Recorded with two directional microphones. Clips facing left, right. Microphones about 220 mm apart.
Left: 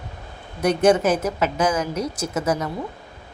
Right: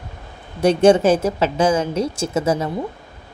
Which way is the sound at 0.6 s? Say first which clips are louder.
Right 4 dB; 30° right (ahead or behind).